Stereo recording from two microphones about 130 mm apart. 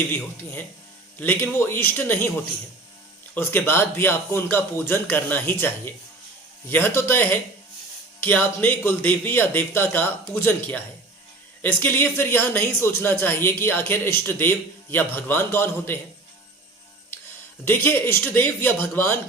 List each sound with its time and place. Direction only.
1.2 s speech: 15° left (ahead or behind)
3.3 s speech: 15° left (ahead or behind)
17.7 s speech: 15° left (ahead or behind)